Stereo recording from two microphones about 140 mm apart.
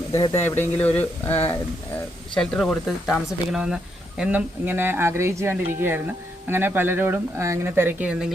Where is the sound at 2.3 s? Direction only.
5° left (ahead or behind).